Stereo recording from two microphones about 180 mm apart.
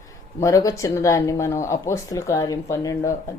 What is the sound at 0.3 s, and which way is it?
Speech, 15° left (ahead or behind).